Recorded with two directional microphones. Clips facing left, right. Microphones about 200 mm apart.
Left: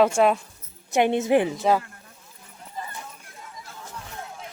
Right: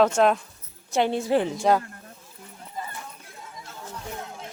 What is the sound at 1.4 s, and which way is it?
Speech, 5° left (ahead or behind).